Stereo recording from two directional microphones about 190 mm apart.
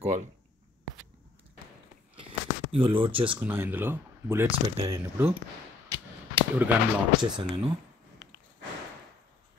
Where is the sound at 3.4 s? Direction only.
10° right (ahead or behind).